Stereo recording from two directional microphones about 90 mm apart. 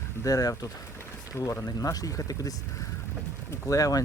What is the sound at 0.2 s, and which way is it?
Speech, 40° left (ahead or behind).